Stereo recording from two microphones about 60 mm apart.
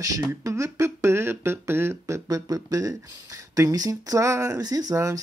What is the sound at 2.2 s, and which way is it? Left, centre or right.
Speech, right.